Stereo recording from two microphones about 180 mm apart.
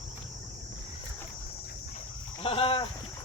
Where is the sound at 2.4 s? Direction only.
30° left (ahead or behind).